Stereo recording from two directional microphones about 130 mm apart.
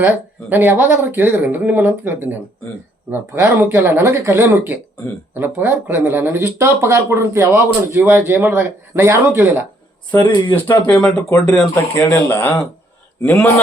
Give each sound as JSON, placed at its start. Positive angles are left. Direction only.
{"t": 0.5, "sound": "speech", "side_deg": -15}
{"t": 10.2, "sound": "speech", "side_deg": 40}
{"t": 10.5, "sound": "speech", "side_deg": 10}
{"t": 11.0, "sound": "speech", "side_deg": 25}